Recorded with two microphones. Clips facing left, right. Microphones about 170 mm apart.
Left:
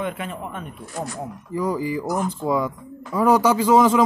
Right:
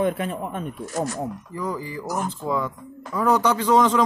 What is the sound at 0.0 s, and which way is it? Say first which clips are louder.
Speech: right 5 dB; 40° right (ahead or behind).